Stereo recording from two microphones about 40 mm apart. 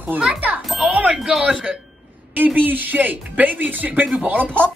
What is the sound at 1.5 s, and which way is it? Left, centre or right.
Speech, right.